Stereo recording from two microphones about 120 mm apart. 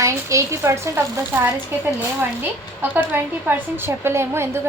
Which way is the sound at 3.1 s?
15° right (ahead or behind).